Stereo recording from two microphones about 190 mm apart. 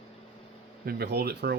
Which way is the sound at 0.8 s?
55° right (ahead or behind).